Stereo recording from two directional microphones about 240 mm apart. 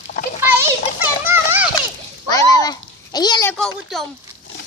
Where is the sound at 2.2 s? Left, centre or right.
Centre.